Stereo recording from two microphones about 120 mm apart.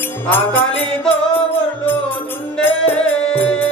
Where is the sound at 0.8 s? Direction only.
5° left (ahead or behind).